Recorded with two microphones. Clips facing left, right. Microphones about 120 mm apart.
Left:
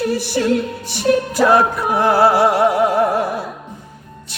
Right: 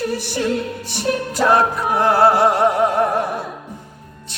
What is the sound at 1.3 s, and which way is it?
Music, 10° left (ahead or behind).